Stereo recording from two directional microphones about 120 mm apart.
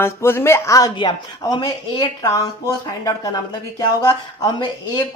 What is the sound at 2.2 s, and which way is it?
Speech, 30° left (ahead or behind).